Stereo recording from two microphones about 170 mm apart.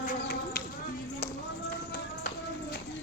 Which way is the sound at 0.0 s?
55° left (ahead or behind).